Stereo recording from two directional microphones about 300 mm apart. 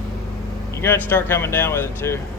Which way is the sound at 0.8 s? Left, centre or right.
Centre.